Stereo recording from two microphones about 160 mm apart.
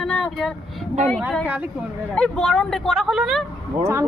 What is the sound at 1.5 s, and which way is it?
Speech, 10° right (ahead or behind).